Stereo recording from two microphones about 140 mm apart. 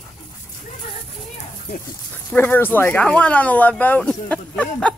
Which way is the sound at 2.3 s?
15° left (ahead or behind).